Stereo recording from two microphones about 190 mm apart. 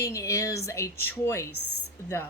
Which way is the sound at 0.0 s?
15° left (ahead or behind).